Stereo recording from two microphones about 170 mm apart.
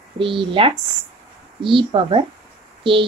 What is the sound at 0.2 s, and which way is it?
A woman's voice, 30° right (ahead or behind).